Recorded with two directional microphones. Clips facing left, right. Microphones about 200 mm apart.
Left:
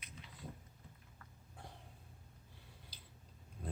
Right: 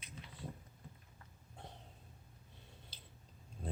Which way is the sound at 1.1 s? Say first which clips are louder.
Right 1 dB; 25° right (ahead or behind).